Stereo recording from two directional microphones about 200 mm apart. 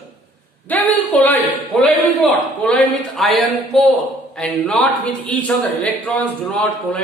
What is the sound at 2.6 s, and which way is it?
Speech, 5° left (ahead or behind).